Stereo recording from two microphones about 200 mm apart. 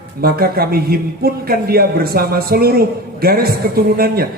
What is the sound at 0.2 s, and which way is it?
A man's voice, 50° right (ahead or behind).